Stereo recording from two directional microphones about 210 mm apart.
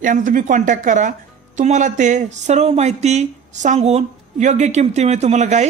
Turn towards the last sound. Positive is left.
turn(degrees=-35)  # may be behind; listen again after turning